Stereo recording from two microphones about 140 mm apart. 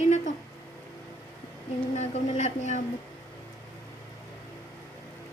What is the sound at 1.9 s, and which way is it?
Speech, 55° left (ahead or behind).